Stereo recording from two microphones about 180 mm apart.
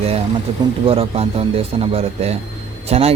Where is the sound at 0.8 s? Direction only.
35° right (ahead or behind).